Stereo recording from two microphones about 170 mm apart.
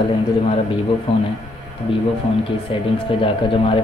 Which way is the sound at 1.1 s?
35° left (ahead or behind).